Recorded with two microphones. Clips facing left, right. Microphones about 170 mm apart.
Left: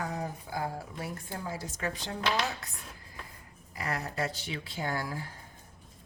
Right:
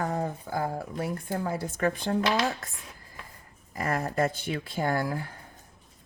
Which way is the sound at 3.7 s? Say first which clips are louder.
Right 7 dB; 50° right (ahead or behind).